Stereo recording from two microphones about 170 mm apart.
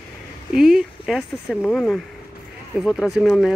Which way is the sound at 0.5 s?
Centre (ahead or behind).